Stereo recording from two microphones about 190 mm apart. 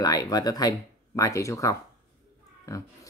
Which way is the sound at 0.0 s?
20° left (ahead or behind).